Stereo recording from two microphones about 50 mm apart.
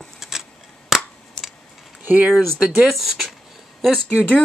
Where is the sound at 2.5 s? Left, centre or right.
Right.